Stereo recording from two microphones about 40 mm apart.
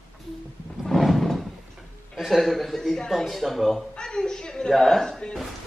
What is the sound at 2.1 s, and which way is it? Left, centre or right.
A man's voice, centre.